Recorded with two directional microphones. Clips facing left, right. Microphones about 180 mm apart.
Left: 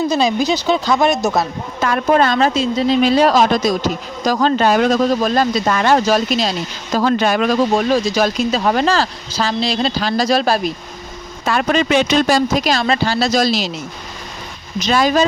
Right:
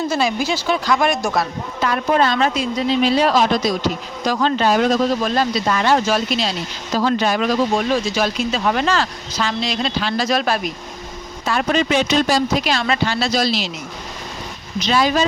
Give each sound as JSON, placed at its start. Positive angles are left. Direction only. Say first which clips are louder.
{"t": 0.1, "sound": "speech", "louder": "left 4 dB", "side_deg": 20}
{"t": 1.8, "sound": "speech", "louder": "left 3 dB", "side_deg": 45}
{"t": 2.4, "sound": "speech", "louder": "left 3 dB", "side_deg": 25}
{"t": 2.9, "sound": "speech", "louder": "left 3 dB", "side_deg": 45}
{"t": 5.2, "sound": "speech", "louder": "left 3 dB", "side_deg": 45}
{"t": 7.8, "sound": "speech", "louder": "left 4 dB", "side_deg": 40}
{"t": 11.4, "sound": "speech", "louder": "left 2 dB", "side_deg": 65}
{"t": 12.6, "sound": "speech", "louder": "left 3 dB", "side_deg": 35}
{"t": 14.8, "sound": "speech", "louder": "left 2 dB", "side_deg": 45}